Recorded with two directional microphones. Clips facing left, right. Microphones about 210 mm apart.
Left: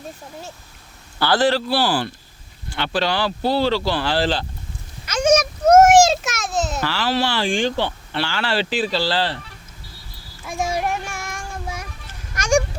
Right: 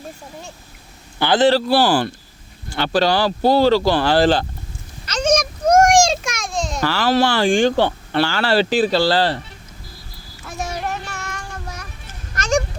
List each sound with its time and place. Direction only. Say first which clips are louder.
1.2 s a man's voice: right 3 dB; 20° right (ahead or behind)
1.5 s speech: right 4 dB; 45° right (ahead or behind)
5.0 s a sound: left 1 dB; 10° left (ahead or behind)
6.8 s speech: right 10 dB; 45° right (ahead or behind)
10.4 s child singing: left 3 dB; 10° left (ahead or behind)
12.3 s honk: left 1 dB; 10° left (ahead or behind)